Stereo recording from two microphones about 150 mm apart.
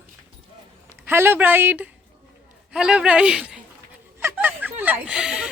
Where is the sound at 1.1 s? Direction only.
15° right (ahead or behind).